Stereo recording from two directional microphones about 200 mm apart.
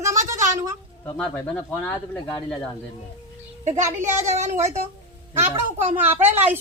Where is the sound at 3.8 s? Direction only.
15° right (ahead or behind).